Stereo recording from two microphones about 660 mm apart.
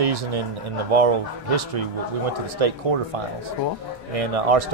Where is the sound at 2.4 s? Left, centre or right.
Right.